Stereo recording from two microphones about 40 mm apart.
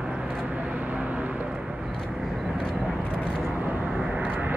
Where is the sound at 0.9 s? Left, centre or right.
Right.